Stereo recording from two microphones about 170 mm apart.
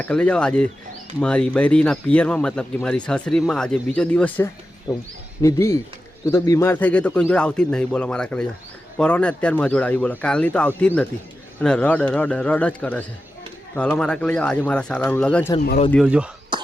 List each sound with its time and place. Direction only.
0.0 s a man's voice: 5° left (ahead or behind)
4.9 s a man's voice: 25° left (ahead or behind); by 15.5 s 5° left (ahead or behind)
16.0 s speech: 5° right (ahead or behind)